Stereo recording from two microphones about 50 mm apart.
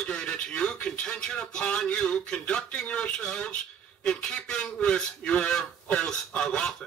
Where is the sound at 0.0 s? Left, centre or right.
Centre.